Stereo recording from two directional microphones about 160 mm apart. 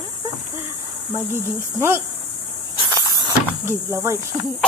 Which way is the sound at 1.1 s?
15° right (ahead or behind).